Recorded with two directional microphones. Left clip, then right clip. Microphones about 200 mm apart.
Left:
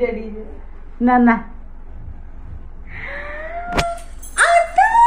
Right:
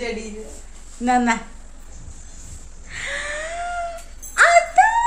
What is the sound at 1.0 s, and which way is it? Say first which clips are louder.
Speech: left 4 dB; 10° left (ahead or behind).